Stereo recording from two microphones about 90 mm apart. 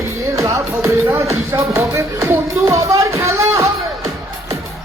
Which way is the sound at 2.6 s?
40° right (ahead or behind).